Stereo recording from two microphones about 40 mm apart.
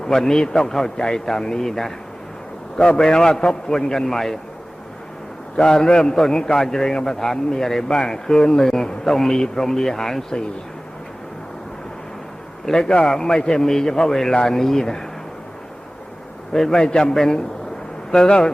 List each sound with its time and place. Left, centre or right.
0.0 s a man's voice: centre
5.5 s a man's voice: centre
12.8 s a man's voice: left
16.5 s a man's voice: centre